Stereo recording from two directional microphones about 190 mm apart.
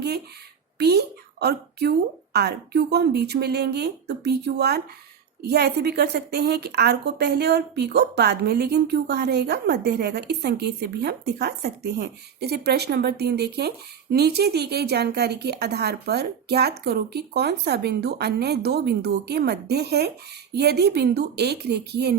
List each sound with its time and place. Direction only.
0.8 s a woman's voice: 60° right (ahead or behind)